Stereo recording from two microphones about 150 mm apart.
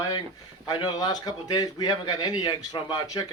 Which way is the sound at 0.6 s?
30° left (ahead or behind).